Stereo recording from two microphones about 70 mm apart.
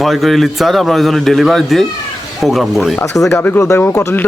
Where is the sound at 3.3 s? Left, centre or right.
Left.